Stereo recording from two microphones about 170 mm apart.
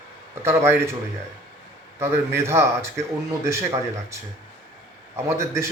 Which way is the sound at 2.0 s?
15° right (ahead or behind).